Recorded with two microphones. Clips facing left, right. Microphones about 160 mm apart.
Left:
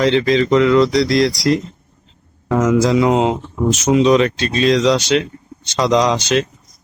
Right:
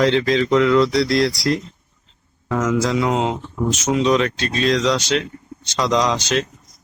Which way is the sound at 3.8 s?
5° left (ahead or behind).